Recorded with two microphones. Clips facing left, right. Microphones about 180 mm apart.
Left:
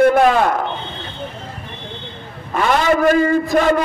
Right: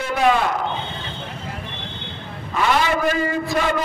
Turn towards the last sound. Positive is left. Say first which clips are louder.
# left 7 dB
turn(degrees=50)  # may be behind; listen again after turning